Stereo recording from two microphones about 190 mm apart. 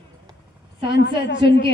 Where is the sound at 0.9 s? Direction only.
65° left (ahead or behind).